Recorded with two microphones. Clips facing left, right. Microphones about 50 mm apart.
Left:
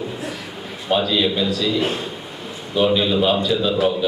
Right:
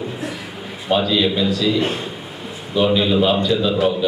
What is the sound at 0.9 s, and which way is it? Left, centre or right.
A man's voice, centre.